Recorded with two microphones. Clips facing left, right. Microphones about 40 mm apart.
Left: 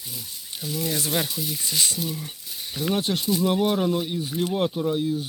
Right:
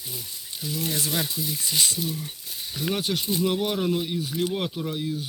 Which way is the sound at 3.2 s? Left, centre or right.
Right.